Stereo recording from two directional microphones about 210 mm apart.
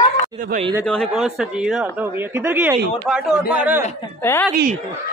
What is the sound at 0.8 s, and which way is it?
Speech, 5° left (ahead or behind).